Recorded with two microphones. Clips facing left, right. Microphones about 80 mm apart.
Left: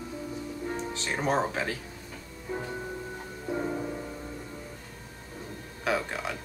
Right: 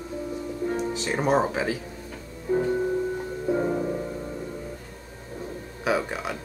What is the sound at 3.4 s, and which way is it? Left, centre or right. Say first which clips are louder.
Music: right 6 dB; centre.